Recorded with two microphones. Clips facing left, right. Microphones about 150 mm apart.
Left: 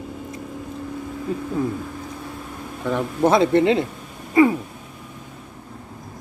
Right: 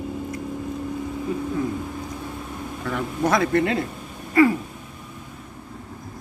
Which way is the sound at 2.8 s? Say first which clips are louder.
Left 5 dB; 20° left (ahead or behind).